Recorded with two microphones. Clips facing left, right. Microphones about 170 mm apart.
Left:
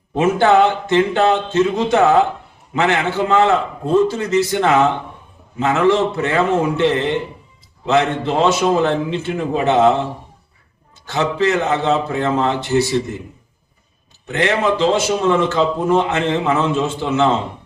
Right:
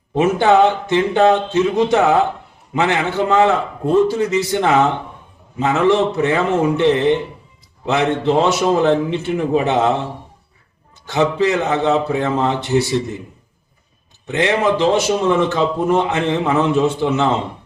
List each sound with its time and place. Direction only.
0.1 s a man's voice: 15° right (ahead or behind)
11.0 s a man's voice: 15° right (ahead or behind)
14.3 s a man's voice: 15° right (ahead or behind)